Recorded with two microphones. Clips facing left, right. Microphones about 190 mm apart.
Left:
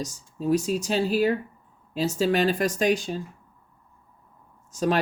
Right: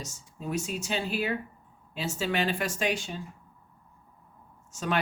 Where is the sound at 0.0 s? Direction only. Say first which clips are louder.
Left 9 dB; 35° left (ahead or behind).